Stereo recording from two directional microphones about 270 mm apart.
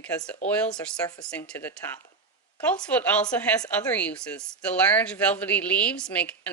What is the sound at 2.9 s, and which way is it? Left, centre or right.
A woman's voice, centre.